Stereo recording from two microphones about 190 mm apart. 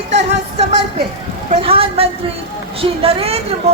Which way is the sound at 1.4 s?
30° right (ahead or behind).